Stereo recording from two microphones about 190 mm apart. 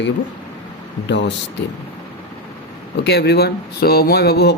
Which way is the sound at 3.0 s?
60° left (ahead or behind).